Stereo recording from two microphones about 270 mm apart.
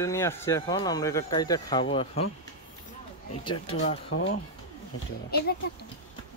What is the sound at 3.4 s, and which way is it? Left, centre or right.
Speech, centre.